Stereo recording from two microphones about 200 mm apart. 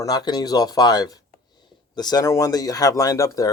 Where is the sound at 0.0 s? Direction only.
20° left (ahead or behind).